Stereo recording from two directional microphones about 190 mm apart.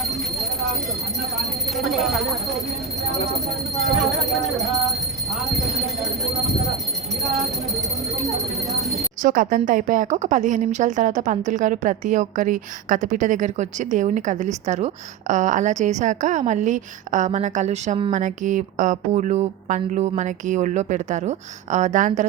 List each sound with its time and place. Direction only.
0.3 s jingle bell: centre (ahead or behind)
1.4 s speech: centre (ahead or behind)
3.8 s speech: centre (ahead or behind)
6.3 s a sound: centre (ahead or behind)
9.2 s a woman's voice: 45° right (ahead or behind)